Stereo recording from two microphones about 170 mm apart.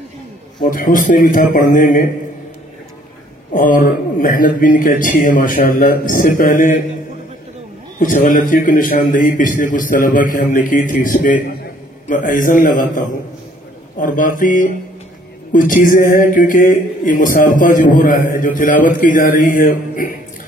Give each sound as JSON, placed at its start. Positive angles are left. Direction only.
{"t": 0.7, "sound": "speech", "side_deg": 50}
{"t": 3.5, "sound": "speech", "side_deg": 55}
{"t": 8.0, "sound": "speech", "side_deg": 50}